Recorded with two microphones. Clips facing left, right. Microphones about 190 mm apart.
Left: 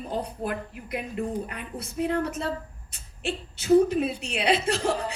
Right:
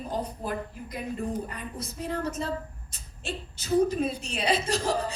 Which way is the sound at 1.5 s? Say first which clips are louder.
Left 1 dB; 65° left (ahead or behind).